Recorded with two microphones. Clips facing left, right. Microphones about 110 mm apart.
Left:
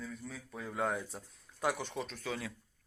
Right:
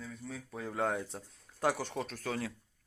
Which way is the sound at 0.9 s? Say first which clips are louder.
Right 2 dB; 25° right (ahead or behind).